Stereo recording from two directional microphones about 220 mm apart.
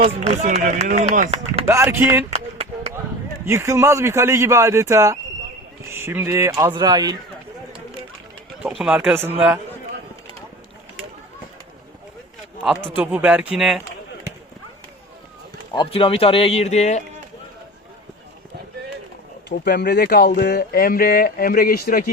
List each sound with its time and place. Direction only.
0.1 s speech: 30° right (ahead or behind)
1.6 s speech: 10° right (ahead or behind)
3.4 s speech: 10° right (ahead or behind)
8.8 s speech: 5° right (ahead or behind)
12.6 s speech: 5° right (ahead or behind)
15.7 s speech: 20° left (ahead or behind)
19.5 s speech: 50° left (ahead or behind)